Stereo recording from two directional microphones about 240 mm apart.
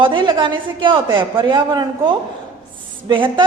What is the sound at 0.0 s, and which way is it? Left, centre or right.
A woman's voice, centre.